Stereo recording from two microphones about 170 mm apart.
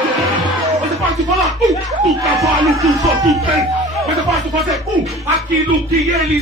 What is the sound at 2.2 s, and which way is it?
Speech, 20° right (ahead or behind).